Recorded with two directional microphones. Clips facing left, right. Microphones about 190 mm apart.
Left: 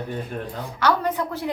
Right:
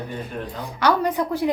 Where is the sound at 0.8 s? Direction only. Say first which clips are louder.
Right 2 dB; 15° right (ahead or behind).